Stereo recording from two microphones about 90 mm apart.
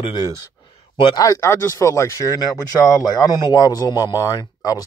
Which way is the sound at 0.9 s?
65° left (ahead or behind).